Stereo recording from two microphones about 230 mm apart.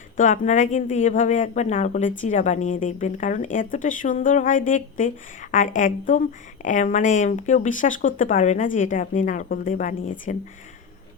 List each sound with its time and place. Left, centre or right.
0.2 s speech: left